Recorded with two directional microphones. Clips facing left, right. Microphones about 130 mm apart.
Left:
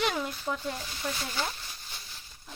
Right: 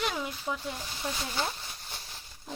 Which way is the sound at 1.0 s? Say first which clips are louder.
Left 1 dB; 15° right (ahead or behind).